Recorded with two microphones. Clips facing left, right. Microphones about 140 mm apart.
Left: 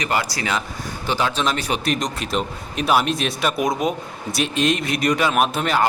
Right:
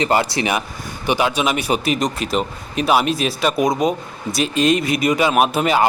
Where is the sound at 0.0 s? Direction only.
25° right (ahead or behind).